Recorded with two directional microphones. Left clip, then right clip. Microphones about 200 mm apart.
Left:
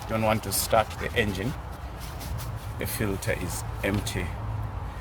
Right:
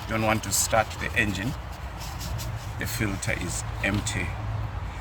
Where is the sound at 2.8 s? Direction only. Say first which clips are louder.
Even; 55° left (ahead or behind).